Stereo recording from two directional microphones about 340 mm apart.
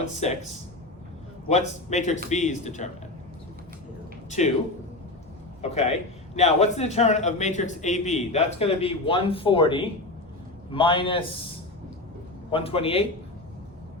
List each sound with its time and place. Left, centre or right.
0.2 s a man's voice: centre
1.5 s a man's voice: centre
5.6 s a man's voice: centre